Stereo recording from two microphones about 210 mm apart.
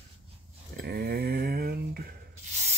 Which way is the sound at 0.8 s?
50° right (ahead or behind).